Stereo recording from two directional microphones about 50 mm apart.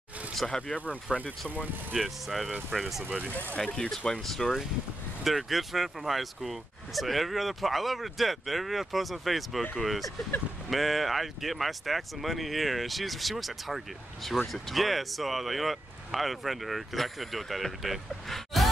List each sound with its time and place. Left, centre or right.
0.5 s speech: centre
1.1 s speech: centre
2.0 s speech: centre
3.5 s speech: centre
4.1 s speech: centre